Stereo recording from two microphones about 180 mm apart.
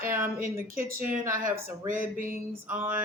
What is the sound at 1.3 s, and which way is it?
Speech, 45° right (ahead or behind).